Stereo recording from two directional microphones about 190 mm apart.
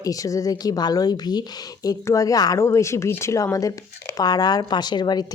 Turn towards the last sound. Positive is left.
turn(degrees=20)  # may be behind; listen again after turning